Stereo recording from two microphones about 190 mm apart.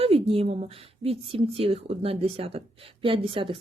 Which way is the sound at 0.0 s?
30° right (ahead or behind).